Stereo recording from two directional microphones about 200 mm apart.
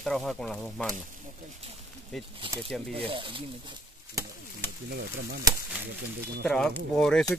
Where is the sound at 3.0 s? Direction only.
25° right (ahead or behind).